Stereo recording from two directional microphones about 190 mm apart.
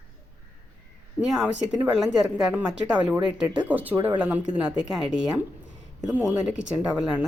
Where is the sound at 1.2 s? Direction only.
5° right (ahead or behind).